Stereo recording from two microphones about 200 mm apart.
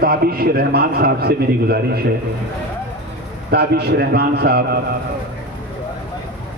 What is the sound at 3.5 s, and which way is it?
A man's voice, 55° right (ahead or behind).